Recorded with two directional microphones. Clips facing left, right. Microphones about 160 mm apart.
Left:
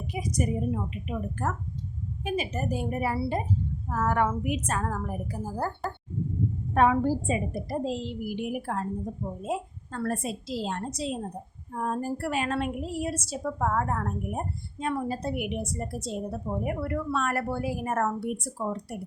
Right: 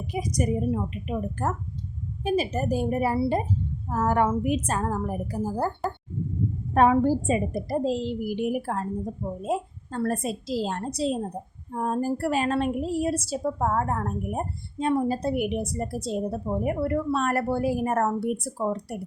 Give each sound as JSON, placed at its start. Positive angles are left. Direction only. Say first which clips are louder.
{"t": 0.1, "sound": "a woman's voice", "louder": "right 3 dB", "side_deg": -40}
{"t": 6.7, "sound": "a woman's voice", "louder": "right 3 dB", "side_deg": -35}